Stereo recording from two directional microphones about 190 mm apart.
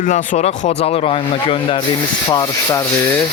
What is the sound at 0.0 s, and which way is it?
Speech, 45° left (ahead or behind).